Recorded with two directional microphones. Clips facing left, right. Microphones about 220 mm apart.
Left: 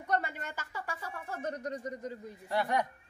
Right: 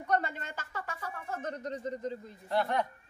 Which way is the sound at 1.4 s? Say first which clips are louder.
Left 1 dB; 10° left (ahead or behind).